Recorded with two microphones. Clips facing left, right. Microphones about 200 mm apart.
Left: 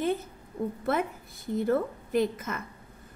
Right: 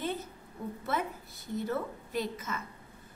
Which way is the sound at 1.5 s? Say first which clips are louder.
Left 7 dB; 55° left (ahead or behind).